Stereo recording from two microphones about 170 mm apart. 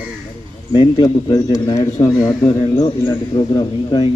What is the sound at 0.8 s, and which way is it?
A man's voice, 25° left (ahead or behind).